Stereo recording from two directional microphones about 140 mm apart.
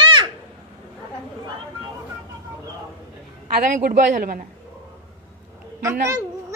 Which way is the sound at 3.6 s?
70° right (ahead or behind).